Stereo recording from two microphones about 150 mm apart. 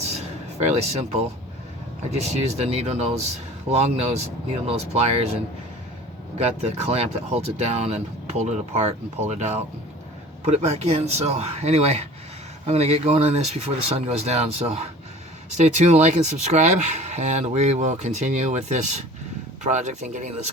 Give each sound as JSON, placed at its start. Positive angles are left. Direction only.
{"t": 0.6, "sound": "speech", "side_deg": -45}